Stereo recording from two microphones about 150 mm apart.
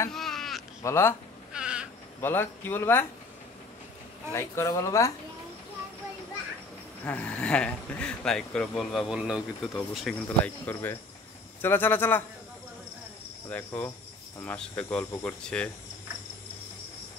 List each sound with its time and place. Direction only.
0.1 s a sound: centre (ahead or behind)
0.8 s speech: 15° left (ahead or behind)
1.5 s a sound: 5° right (ahead or behind)
2.2 s speech: 15° left (ahead or behind)
4.3 s speech: 20° left (ahead or behind)
7.1 s speech: 10° left (ahead or behind)
10.2 s speech: 10° left (ahead or behind)
13.5 s speech: 10° left (ahead or behind)